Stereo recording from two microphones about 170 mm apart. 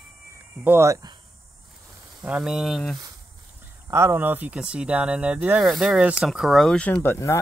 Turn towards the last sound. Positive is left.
turn(degrees=15)  # may be behind; listen again after turning